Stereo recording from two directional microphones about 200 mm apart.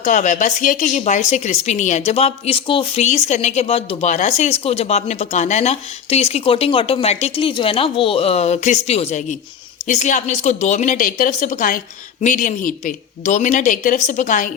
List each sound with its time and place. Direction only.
0.0 s speech: 40° left (ahead or behind)